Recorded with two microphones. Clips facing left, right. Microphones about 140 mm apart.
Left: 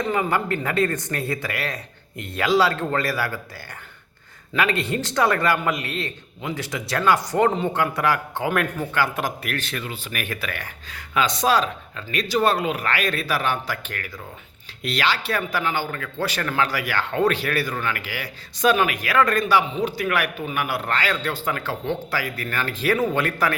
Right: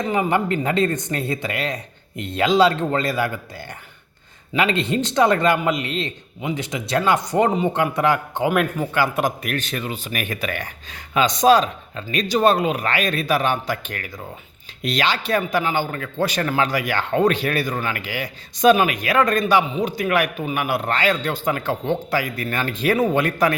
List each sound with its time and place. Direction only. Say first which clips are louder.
0.1 s a man's voice: right 5 dB; 20° right (ahead or behind)
4.5 s a man's voice: right 3 dB; 20° right (ahead or behind)